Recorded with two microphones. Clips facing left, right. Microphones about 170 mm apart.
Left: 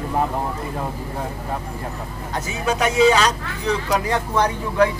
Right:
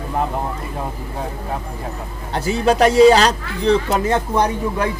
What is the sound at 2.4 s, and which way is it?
Speech, 35° right (ahead or behind).